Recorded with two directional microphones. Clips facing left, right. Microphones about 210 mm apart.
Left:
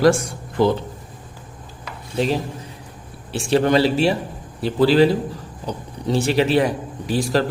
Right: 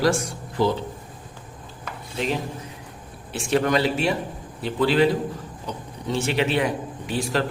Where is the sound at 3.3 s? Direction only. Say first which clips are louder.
Left 4 dB; 30° left (ahead or behind).